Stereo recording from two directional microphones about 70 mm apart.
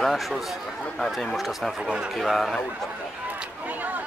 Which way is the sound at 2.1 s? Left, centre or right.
Centre.